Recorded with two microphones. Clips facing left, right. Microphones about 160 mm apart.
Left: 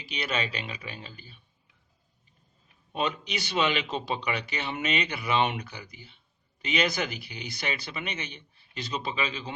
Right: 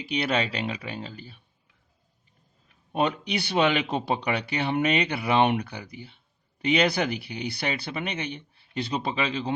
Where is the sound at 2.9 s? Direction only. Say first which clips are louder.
Right 5 dB; 60° right (ahead or behind).